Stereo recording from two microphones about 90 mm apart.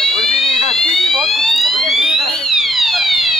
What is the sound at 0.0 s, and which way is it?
Fire alarm, 5° left (ahead or behind).